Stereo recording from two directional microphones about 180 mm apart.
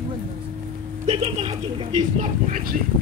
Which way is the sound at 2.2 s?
45° right (ahead or behind).